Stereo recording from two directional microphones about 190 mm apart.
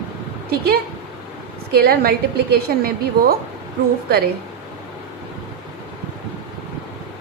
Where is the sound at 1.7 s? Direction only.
55° right (ahead or behind).